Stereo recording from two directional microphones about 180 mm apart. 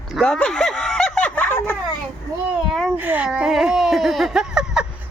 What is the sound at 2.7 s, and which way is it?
A child's voice, 5° right (ahead or behind).